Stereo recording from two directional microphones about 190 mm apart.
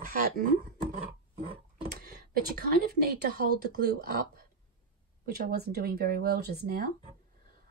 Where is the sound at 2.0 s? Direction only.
55° right (ahead or behind).